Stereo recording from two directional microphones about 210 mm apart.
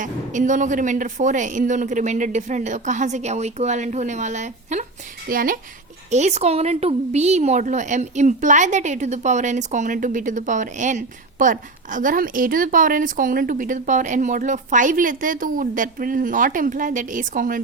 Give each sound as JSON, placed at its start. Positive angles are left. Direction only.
{"t": 0.0, "sound": "a woman's voice", "side_deg": -35}